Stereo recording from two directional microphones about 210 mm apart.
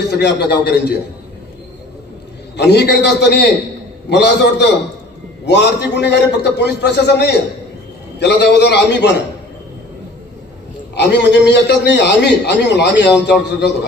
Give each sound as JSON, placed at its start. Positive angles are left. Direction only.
{"t": 0.1, "sound": "a man's voice", "side_deg": 50}
{"t": 2.6, "sound": "a man's voice", "side_deg": 50}
{"t": 10.9, "sound": "a man's voice", "side_deg": 55}